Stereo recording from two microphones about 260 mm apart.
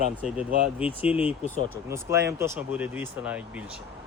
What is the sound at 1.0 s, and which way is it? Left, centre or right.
Speech, centre.